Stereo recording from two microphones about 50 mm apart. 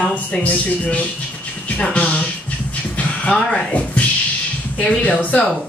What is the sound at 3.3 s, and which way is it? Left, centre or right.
Speech, left.